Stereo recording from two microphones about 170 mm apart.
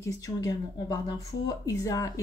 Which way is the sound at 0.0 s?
20° left (ahead or behind).